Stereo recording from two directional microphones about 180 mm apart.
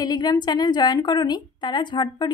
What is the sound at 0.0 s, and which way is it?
A woman's voice, 25° left (ahead or behind).